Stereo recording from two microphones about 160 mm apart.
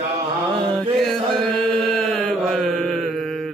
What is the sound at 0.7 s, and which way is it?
Chant, 5° left (ahead or behind).